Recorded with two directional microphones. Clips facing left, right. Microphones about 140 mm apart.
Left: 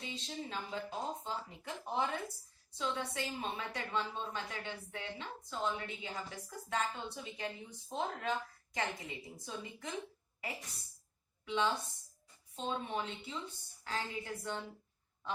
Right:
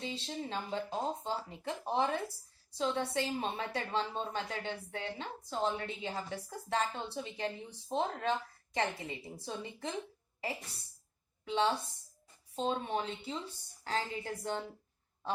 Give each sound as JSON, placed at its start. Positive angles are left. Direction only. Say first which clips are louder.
{"t": 0.0, "sound": "a woman's voice", "louder": "right 4 dB", "side_deg": -30}
{"t": 11.4, "sound": "a woman's voice", "louder": "right 3 dB", "side_deg": -30}